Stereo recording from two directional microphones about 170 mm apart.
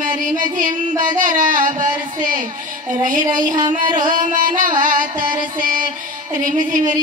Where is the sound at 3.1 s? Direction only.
50° right (ahead or behind).